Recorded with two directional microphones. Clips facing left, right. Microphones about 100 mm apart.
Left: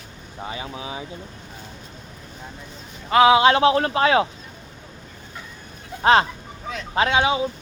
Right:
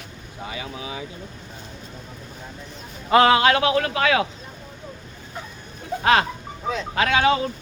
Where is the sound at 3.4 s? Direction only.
25° left (ahead or behind).